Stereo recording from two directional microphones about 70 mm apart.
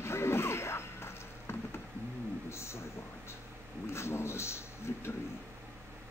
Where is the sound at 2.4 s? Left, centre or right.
Left.